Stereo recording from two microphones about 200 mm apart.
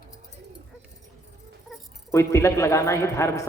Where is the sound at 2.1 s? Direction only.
15° left (ahead or behind).